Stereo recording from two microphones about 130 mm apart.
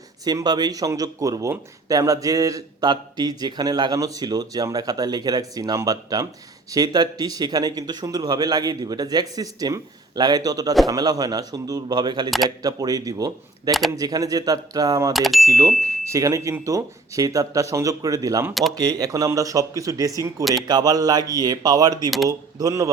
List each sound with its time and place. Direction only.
0.3 s speech: 30° right (ahead or behind)
15.1 s speech: centre (ahead or behind)
15.4 s speech: 25° right (ahead or behind)